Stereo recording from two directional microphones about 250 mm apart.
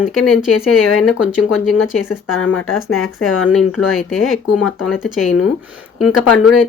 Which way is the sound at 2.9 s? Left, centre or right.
Left.